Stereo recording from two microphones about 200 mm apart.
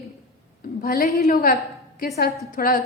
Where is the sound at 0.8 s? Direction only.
45° left (ahead or behind).